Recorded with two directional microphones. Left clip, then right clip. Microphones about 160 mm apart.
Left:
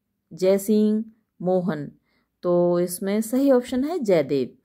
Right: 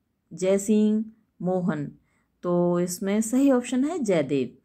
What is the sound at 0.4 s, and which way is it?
A woman's voice, 30° left (ahead or behind).